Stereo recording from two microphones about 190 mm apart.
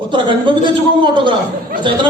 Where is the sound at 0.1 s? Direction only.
25° right (ahead or behind).